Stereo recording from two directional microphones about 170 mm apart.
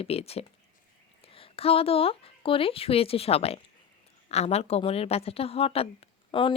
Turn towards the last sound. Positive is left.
turn(degrees=30)  # may be behind; listen again after turning